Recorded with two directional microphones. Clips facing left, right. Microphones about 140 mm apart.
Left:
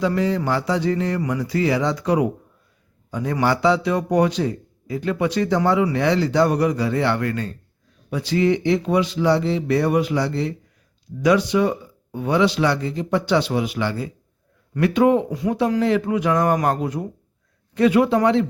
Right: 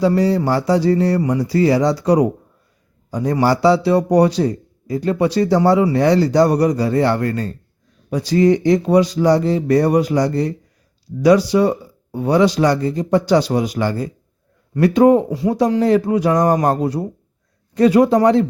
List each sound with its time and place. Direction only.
0.0 s a man's voice: 35° right (ahead or behind)